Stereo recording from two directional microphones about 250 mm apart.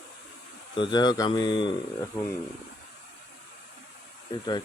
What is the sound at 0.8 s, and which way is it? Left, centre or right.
Speech, centre.